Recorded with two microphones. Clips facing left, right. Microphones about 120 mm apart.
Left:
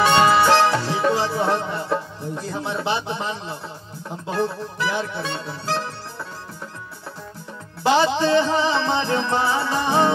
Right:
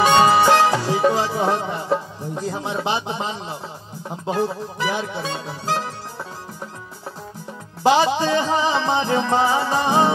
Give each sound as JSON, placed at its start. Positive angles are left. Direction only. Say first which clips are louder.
{"t": 0.3, "sound": "music", "louder": "right 1 dB", "side_deg": -15}
{"t": 0.9, "sound": "music", "louder": "right 2 dB", "side_deg": -45}
{"t": 1.4, "sound": "music", "louder": "right 1 dB", "side_deg": -15}
{"t": 7.8, "sound": "music", "louder": "right 1 dB", "side_deg": -15}